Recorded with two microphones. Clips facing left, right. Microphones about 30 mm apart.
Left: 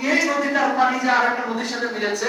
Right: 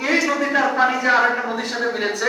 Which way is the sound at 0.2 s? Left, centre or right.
Centre.